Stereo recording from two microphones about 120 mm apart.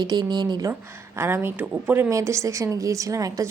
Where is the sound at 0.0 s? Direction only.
35° right (ahead or behind).